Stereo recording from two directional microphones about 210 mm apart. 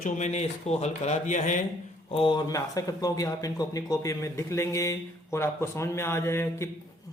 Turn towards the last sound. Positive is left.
turn(degrees=10)  # may be behind; listen again after turning